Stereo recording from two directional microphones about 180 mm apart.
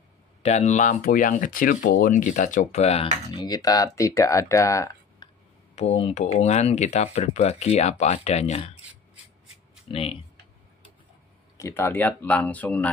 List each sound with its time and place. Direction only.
0.4 s speech: 40° left (ahead or behind)
3.4 s speech: 20° left (ahead or behind)
5.8 s speech: 35° left (ahead or behind)
9.8 s speech: 30° left (ahead or behind)
11.5 s speech: 15° left (ahead or behind)